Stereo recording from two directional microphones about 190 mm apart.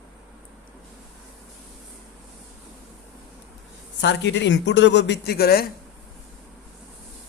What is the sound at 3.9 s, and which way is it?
A man's voice, 70° left (ahead or behind).